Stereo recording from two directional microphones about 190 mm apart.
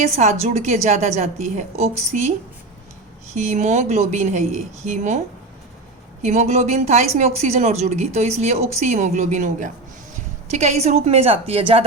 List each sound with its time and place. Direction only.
0.2 s a woman's voice: 35° right (ahead or behind)
3.3 s a woman's voice: 40° right (ahead or behind)
6.2 s a woman's voice: 35° right (ahead or behind)